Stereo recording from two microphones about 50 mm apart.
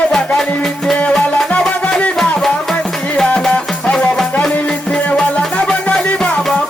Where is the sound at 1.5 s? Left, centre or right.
Left.